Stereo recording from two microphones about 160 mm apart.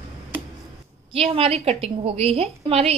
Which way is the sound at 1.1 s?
35° right (ahead or behind).